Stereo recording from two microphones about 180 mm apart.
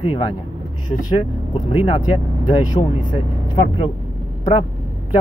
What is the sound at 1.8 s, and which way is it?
Speech, 30° left (ahead or behind).